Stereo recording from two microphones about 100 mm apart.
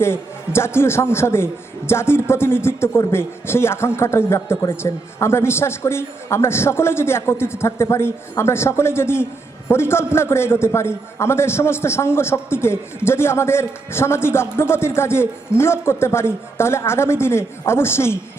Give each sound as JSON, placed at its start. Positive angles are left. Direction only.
{"t": 0.0, "sound": "a man's voice", "side_deg": 25}